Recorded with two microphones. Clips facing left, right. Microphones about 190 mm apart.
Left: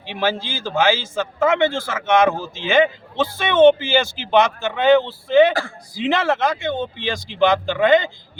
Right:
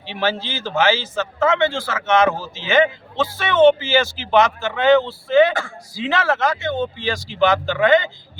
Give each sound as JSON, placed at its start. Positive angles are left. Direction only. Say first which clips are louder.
{"t": 0.0, "sound": "speech", "louder": "even", "side_deg": 15}